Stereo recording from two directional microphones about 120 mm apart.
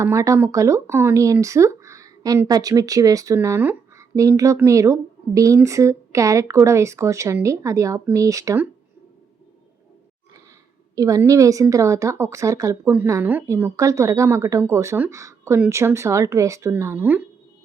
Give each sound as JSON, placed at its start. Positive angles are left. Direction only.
{"t": 0.0, "sound": "speech", "side_deg": -25}
{"t": 10.9, "sound": "a woman's voice", "side_deg": -30}
{"t": 13.2, "sound": "a woman's voice", "side_deg": -15}
{"t": 13.7, "sound": "speech", "side_deg": -25}